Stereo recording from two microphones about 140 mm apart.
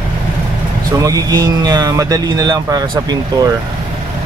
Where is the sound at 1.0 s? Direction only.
25° right (ahead or behind).